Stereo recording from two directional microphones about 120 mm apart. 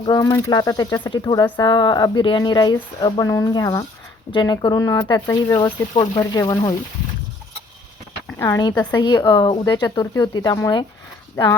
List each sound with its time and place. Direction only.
0.2 s speech: 30° left (ahead or behind)
8.4 s speech: 25° left (ahead or behind)